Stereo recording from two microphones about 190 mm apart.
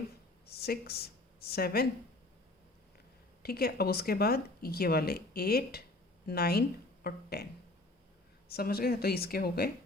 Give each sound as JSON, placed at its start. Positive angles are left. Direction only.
{"t": 0.4, "sound": "speech", "side_deg": 55}
{"t": 3.4, "sound": "speech", "side_deg": 55}
{"t": 8.4, "sound": "speech", "side_deg": 55}